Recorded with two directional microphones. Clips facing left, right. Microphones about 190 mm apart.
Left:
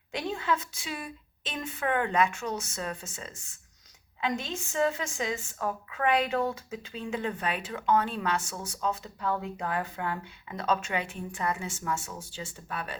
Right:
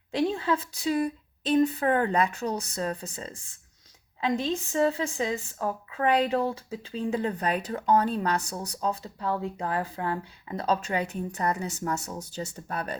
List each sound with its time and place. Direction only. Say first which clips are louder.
0.1 s a woman's voice: right 5 dB; 30° right (ahead or behind)